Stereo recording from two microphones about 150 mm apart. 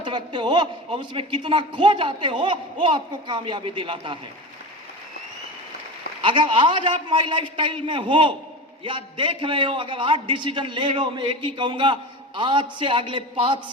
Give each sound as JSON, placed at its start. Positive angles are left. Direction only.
{"t": 0.0, "sound": "a man's voice", "side_deg": -30}
{"t": 6.2, "sound": "a man's voice", "side_deg": -35}